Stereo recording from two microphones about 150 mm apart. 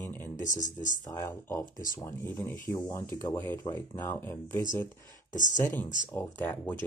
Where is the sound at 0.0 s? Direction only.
15° left (ahead or behind).